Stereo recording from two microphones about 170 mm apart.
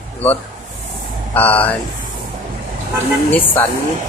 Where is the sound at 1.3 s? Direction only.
10° left (ahead or behind).